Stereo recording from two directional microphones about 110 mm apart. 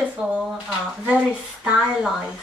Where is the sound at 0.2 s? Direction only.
5° right (ahead or behind).